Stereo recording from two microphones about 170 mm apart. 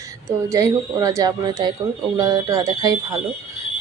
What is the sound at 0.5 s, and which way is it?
Speech, 20° right (ahead or behind).